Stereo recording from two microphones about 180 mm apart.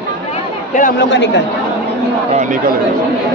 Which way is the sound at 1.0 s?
75° left (ahead or behind).